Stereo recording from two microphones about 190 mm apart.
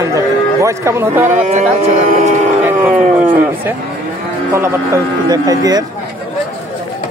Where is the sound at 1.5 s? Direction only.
35° right (ahead or behind).